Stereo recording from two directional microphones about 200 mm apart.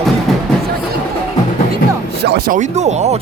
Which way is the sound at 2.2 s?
50° right (ahead or behind).